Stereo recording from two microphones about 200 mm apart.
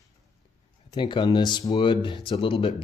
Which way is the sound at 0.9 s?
25° left (ahead or behind).